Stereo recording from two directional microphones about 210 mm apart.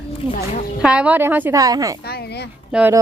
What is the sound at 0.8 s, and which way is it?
A woman's voice, 5° right (ahead or behind).